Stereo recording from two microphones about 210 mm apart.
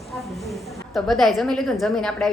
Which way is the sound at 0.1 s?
Centre (ahead or behind).